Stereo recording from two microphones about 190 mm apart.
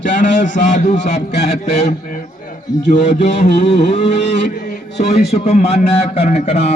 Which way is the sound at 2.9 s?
40° left (ahead or behind).